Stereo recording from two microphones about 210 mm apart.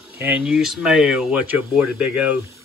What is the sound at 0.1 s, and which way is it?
Speech, 5° right (ahead or behind).